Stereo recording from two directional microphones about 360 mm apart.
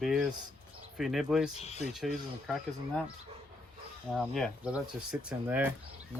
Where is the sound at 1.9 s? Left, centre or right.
Centre.